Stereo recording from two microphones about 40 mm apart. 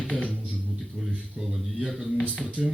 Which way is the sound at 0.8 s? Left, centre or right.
Centre.